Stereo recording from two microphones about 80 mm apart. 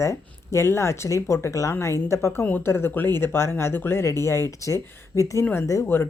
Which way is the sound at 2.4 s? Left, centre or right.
Left.